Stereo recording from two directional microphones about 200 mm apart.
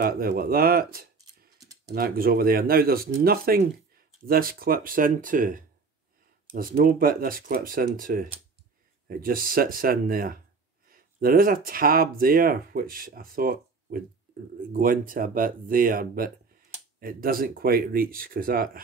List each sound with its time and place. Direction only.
0.0 s speech: 50° right (ahead or behind)